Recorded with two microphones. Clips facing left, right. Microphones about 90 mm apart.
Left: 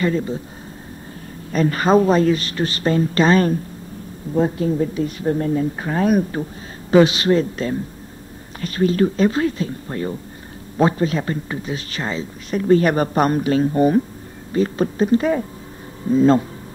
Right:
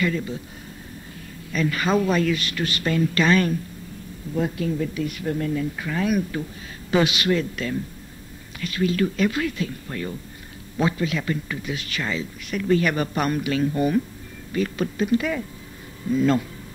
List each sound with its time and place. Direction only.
0.0 s speech: 35° left (ahead or behind)
1.5 s speech: 40° left (ahead or behind)